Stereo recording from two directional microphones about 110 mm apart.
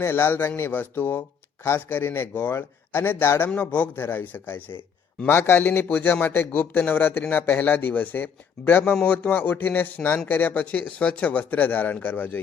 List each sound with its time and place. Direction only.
0.0 s a man's voice: 20° left (ahead or behind)